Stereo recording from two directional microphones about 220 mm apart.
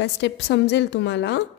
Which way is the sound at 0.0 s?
50° left (ahead or behind).